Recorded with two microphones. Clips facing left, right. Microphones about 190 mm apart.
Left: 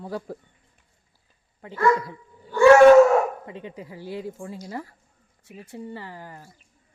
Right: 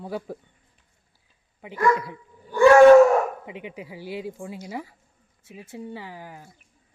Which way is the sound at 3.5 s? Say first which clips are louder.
Even; 15° right (ahead or behind).